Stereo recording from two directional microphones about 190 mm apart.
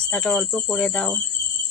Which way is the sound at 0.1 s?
5° left (ahead or behind).